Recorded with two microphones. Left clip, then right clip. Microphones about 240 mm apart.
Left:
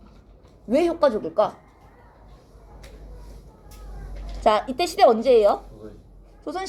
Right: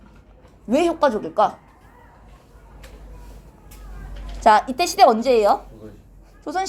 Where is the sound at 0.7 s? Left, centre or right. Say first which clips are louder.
Right 1 dB; centre.